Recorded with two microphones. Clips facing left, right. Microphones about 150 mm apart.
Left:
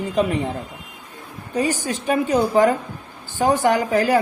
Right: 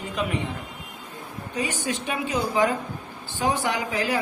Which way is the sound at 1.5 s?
40° left (ahead or behind).